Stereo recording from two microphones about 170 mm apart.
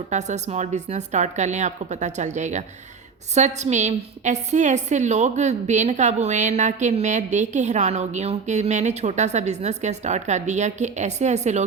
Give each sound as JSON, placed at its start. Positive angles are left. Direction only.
{"t": 0.1, "sound": "a woman's voice", "side_deg": -45}